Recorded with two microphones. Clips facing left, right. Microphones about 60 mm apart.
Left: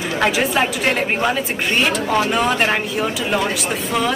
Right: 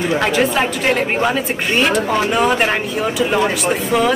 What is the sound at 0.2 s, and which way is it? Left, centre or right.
A woman's voice, centre.